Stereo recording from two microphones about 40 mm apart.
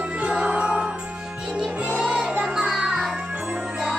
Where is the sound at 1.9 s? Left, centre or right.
Centre.